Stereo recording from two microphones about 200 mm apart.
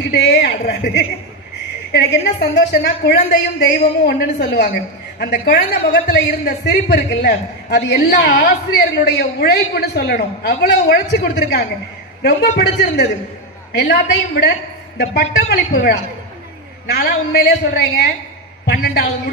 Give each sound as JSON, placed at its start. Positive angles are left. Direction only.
{"t": 0.0, "sound": "a man's voice", "side_deg": 55}